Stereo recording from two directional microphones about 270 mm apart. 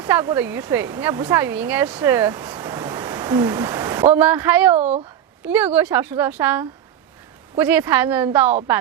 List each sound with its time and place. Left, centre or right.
0.0 s a woman's voice: centre
4.8 s speech: right
5.5 s a woman's voice: centre